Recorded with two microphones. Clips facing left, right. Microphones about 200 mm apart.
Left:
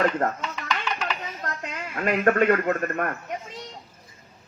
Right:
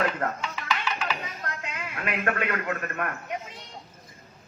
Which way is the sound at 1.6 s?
45° left (ahead or behind).